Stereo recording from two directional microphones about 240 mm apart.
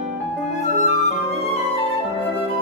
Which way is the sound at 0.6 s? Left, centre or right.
Left.